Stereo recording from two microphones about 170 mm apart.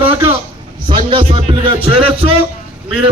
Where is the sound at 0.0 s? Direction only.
35° right (ahead or behind).